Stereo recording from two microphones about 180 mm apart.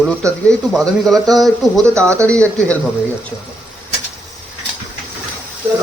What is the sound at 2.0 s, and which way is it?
Speech, 15° right (ahead or behind).